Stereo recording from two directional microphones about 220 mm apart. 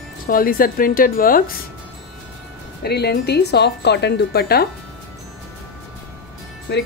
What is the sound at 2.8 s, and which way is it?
Speech, 50° left (ahead or behind).